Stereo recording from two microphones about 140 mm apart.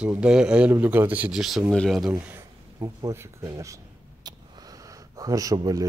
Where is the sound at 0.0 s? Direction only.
10° right (ahead or behind).